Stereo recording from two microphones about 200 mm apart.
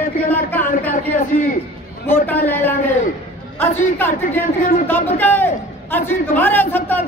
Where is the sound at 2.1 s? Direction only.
10° left (ahead or behind).